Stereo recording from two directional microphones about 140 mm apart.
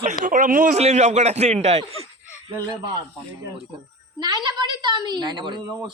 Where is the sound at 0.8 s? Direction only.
55° right (ahead or behind).